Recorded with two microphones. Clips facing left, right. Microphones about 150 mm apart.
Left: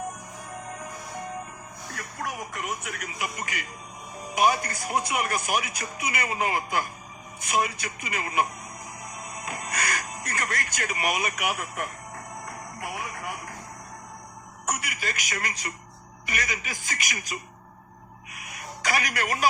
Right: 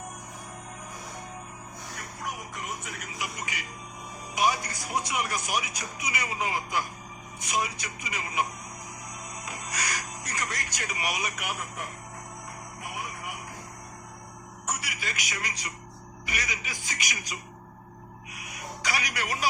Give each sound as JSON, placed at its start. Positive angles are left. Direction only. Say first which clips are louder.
{"t": 2.2, "sound": "speech", "louder": "left 4 dB", "side_deg": 75}
{"t": 4.4, "sound": "speech", "louder": "left 4 dB", "side_deg": 55}
{"t": 14.7, "sound": "a woman's voice", "louder": "left 4 dB", "side_deg": 50}
{"t": 18.3, "sound": "a sound", "louder": "even", "side_deg": 55}